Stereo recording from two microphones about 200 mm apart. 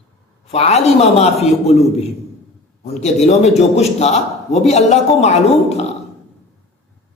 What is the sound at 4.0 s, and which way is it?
A man's voice, 30° left (ahead or behind).